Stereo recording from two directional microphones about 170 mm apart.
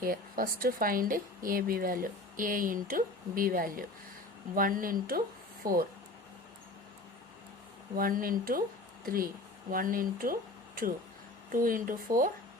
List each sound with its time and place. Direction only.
0.0 s speech: 55° right (ahead or behind)
7.9 s speech: 55° right (ahead or behind)
11.5 s speech: 55° right (ahead or behind)